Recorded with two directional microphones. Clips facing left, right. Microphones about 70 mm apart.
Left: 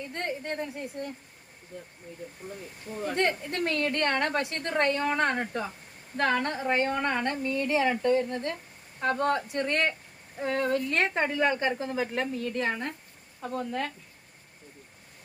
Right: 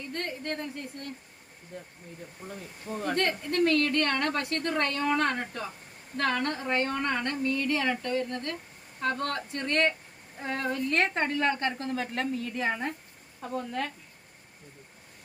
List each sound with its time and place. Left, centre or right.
0.1 s speech: centre
3.2 s a woman's voice: centre
10.4 s a woman's voice: centre